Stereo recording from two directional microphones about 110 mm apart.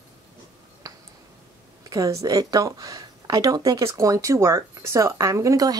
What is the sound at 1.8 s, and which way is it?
Speech, 30° right (ahead or behind).